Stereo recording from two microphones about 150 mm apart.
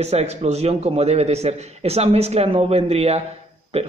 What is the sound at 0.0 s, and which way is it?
Speech, 45° right (ahead or behind).